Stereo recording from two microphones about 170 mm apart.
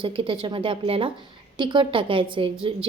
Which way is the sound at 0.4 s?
30° right (ahead or behind).